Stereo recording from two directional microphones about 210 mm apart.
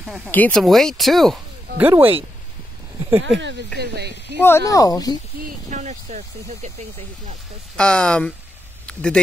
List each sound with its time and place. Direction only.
0.0 s speech: centre (ahead or behind)
1.8 s speech: 10° right (ahead or behind)
3.3 s speech: 55° right (ahead or behind)
4.4 s speech: 10° left (ahead or behind)
5.7 s speech: 35° right (ahead or behind)
7.7 s speech: 5° left (ahead or behind)